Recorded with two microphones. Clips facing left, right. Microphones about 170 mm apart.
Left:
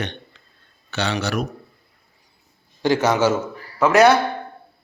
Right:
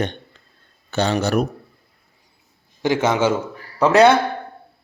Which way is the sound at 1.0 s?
45° right (ahead or behind).